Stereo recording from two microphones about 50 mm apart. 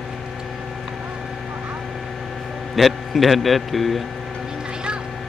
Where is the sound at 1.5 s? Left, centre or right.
Right.